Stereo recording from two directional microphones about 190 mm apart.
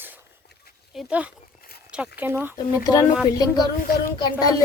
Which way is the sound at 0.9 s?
5° right (ahead or behind).